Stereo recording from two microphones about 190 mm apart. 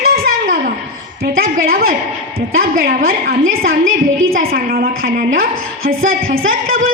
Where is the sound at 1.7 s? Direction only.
50° right (ahead or behind).